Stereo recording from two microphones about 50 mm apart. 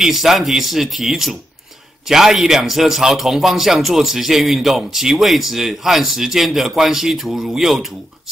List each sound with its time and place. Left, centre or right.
0.0 s a man's voice: centre